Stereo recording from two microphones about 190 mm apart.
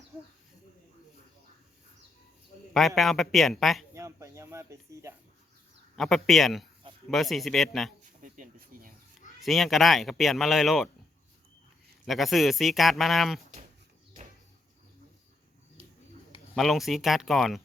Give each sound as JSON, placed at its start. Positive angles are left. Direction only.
{"t": 2.7, "sound": "speech", "side_deg": 0}
{"t": 3.9, "sound": "a sound", "side_deg": -15}
{"t": 6.0, "sound": "speech", "side_deg": 0}
{"t": 8.0, "sound": "a sound", "side_deg": -40}
{"t": 9.4, "sound": "speech", "side_deg": 0}
{"t": 12.0, "sound": "speech", "side_deg": 0}
{"t": 15.8, "sound": "bird", "side_deg": -30}
{"t": 16.6, "sound": "speech", "side_deg": 0}